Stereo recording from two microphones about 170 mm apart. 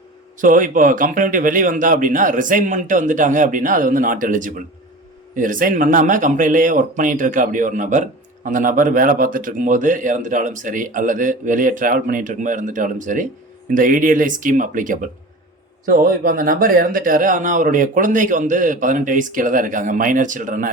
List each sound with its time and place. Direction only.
0.3 s speech: 50° right (ahead or behind)